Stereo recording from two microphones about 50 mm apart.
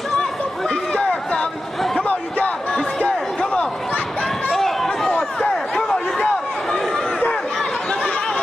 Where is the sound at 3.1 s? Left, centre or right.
Centre.